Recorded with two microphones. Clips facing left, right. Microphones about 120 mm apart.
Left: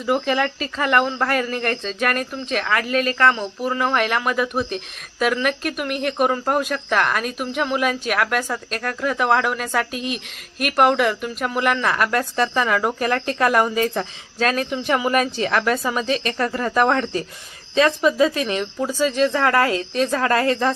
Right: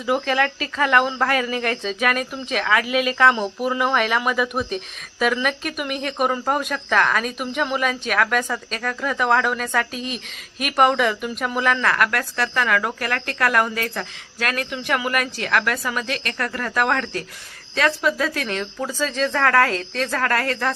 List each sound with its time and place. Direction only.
0.0 s speech: centre (ahead or behind); by 20.7 s 20° left (ahead or behind)